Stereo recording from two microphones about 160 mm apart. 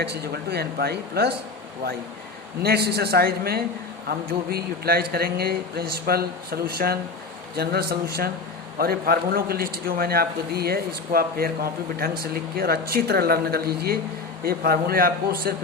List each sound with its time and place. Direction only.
0.0 s speech: 85° right
2.6 s a man's voice: 85° right; by 15.5 s 65° right (ahead or behind)